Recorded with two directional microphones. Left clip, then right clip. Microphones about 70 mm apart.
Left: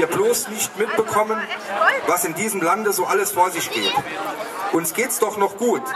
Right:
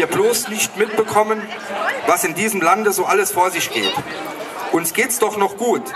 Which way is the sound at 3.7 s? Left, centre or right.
Centre.